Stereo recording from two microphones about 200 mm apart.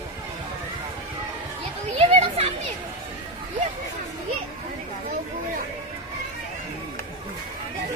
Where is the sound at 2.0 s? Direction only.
30° right (ahead or behind).